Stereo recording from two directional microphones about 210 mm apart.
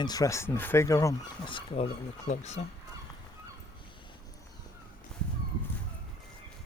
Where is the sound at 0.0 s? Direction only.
15° left (ahead or behind); by 2.6 s 35° left (ahead or behind).